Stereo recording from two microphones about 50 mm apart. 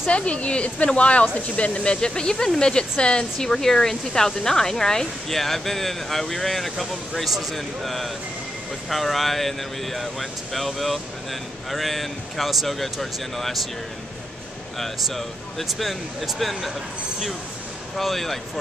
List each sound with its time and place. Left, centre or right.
0.1 s speech: left; by 13.6 s centre
14.8 s speech: centre
17.9 s speech: centre